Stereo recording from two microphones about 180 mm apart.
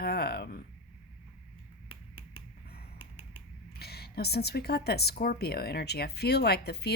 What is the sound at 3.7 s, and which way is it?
A woman's voice, 60° left (ahead or behind).